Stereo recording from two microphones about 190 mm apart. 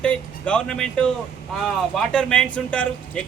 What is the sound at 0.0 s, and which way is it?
Speech, 5° left (ahead or behind).